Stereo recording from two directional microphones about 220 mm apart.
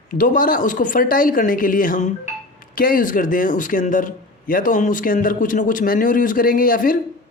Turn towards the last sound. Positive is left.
turn(degrees=40)  # may be behind; listen again after turning